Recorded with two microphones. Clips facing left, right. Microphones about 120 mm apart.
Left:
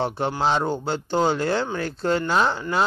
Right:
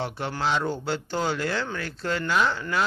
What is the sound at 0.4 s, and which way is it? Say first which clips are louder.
Speech: left 3 dB; 35° left (ahead or behind).